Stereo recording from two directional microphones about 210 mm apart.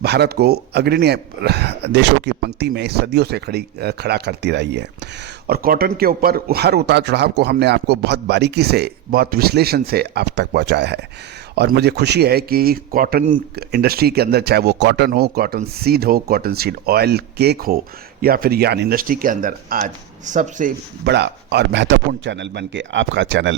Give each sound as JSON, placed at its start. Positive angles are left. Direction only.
{"t": 0.0, "sound": "speech", "side_deg": -50}